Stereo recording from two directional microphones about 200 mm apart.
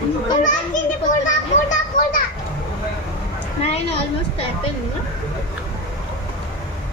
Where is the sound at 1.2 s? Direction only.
40° left (ahead or behind).